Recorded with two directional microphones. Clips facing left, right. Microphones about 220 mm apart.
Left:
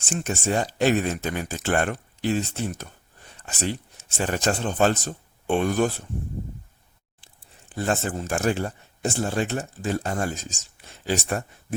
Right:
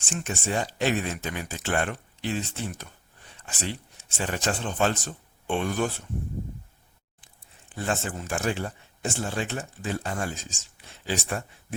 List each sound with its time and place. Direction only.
0.3 s speech: 40° left (ahead or behind)
7.8 s speech: 40° left (ahead or behind)